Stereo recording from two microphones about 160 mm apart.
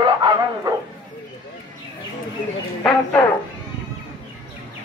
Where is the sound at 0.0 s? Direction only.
30° right (ahead or behind).